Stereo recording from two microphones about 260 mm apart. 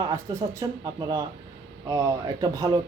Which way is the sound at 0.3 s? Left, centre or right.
Centre.